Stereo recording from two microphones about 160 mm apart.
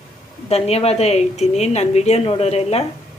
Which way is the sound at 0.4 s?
40° left (ahead or behind).